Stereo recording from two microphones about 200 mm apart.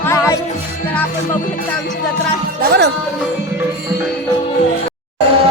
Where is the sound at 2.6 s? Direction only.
55° right (ahead or behind).